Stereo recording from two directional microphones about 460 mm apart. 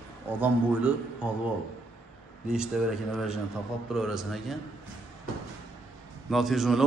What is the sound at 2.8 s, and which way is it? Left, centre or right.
A man's voice, centre.